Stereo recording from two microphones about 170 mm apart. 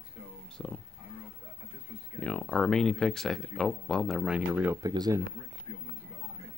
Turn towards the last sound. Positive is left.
turn(degrees=-25)  # may be behind; listen again after turning